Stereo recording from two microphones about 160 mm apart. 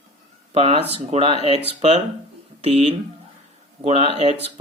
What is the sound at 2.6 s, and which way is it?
A man's voice, 40° right (ahead or behind).